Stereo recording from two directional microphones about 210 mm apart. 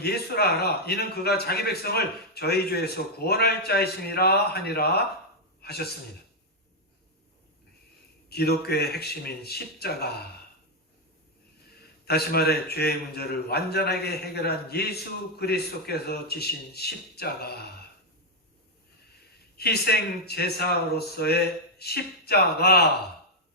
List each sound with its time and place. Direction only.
0.0 s a man's voice: 50° left (ahead or behind)
8.3 s a man's voice: 50° left (ahead or behind)
12.0 s a man's voice: 50° left (ahead or behind)
19.5 s a man's voice: 50° left (ahead or behind)